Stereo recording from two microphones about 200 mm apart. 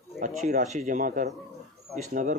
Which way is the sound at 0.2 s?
40° right (ahead or behind).